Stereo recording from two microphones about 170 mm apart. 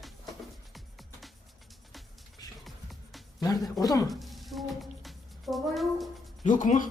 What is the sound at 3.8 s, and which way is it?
Speech, 20° left (ahead or behind).